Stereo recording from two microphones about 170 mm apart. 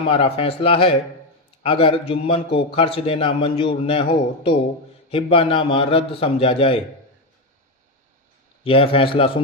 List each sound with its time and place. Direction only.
0.1 s a man's voice: 35° left (ahead or behind)
5.1 s a man's voice: 30° left (ahead or behind)
8.6 s a man's voice: 35° left (ahead or behind)